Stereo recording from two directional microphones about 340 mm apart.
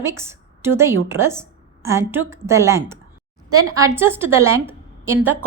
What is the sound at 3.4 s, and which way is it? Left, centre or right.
Speech, right.